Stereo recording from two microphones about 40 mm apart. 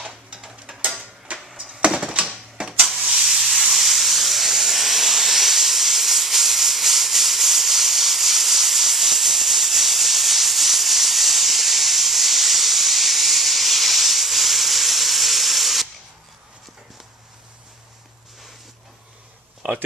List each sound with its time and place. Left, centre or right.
1.3 s music: right
1.9 s a sound: centre
2.6 s sanding: right
3.0 s steam: centre